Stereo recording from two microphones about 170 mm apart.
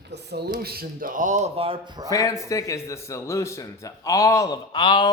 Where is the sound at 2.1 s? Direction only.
20° left (ahead or behind).